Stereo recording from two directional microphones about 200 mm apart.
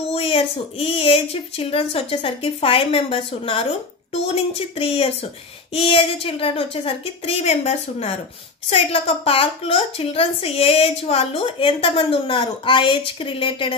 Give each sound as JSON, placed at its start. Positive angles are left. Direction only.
{"t": 0.1, "sound": "a woman's voice", "side_deg": 30}